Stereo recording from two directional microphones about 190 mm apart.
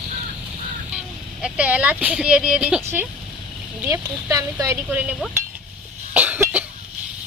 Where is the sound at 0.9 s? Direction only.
5° right (ahead or behind).